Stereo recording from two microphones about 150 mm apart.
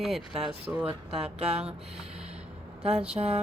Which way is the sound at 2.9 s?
5° right (ahead or behind).